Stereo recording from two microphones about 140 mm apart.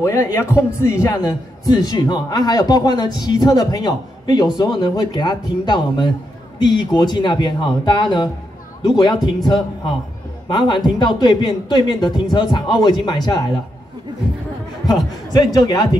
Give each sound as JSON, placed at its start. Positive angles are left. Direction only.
{"t": 0.0, "sound": "a man's voice", "side_deg": 20}
{"t": 10.5, "sound": "speech", "side_deg": 30}
{"t": 15.3, "sound": "a man's voice", "side_deg": 25}